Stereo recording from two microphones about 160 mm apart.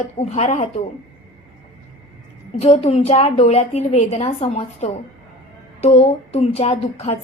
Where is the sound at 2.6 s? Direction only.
40° left (ahead or behind).